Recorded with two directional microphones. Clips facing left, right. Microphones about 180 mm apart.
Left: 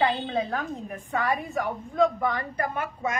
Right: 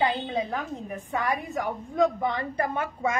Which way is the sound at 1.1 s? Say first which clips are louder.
Left 2 dB; 15° right (ahead or behind).